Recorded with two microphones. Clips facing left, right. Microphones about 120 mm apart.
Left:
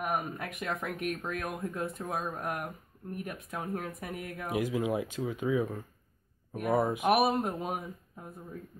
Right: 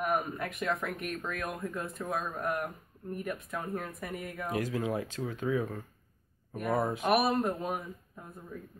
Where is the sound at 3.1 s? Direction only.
10° left (ahead or behind).